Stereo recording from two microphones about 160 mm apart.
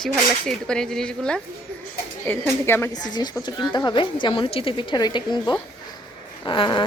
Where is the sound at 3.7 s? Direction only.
25° left (ahead or behind).